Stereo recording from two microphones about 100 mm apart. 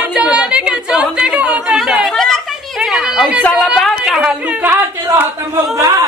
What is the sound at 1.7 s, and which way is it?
Chatter, centre (ahead or behind).